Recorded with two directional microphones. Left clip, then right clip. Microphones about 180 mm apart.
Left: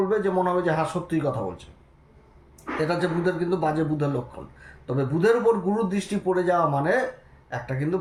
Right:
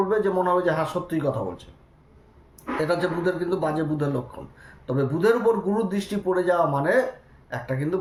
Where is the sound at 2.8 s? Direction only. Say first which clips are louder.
Right 1 dB; 15° right (ahead or behind).